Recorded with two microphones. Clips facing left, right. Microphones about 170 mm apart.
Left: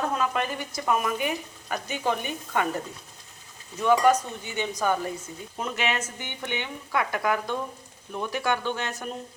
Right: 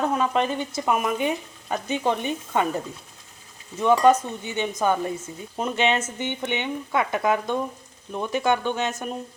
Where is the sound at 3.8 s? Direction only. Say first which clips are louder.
Right 3 dB; 20° right (ahead or behind).